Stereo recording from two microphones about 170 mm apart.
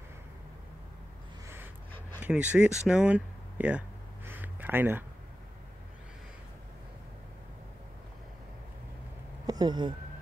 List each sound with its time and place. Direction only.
2.2 s speech: 10° right (ahead or behind)
4.3 s a sound: 10° right (ahead or behind)
9.5 s speech: 25° right (ahead or behind)